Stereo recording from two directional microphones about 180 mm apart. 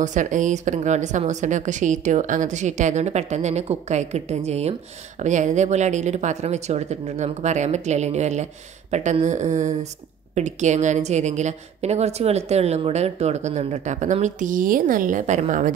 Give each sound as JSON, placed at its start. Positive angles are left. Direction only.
{"t": 0.0, "sound": "a woman's voice", "side_deg": -45}